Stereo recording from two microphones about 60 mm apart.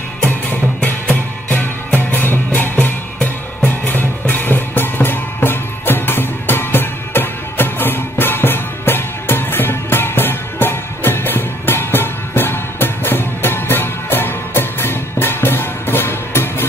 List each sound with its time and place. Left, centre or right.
1.5 s music: left